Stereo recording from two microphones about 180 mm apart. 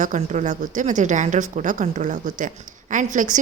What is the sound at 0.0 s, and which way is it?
Speech, 45° right (ahead or behind).